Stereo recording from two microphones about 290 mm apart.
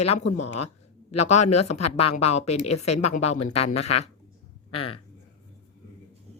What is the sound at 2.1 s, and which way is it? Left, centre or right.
A woman's voice, left.